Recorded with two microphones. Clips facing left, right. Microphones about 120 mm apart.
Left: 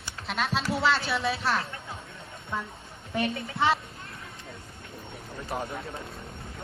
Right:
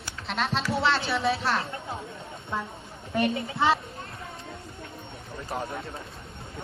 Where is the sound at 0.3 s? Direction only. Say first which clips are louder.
Right 1 dB; centre (ahead or behind).